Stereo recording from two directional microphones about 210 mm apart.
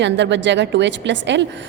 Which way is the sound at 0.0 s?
60° right (ahead or behind).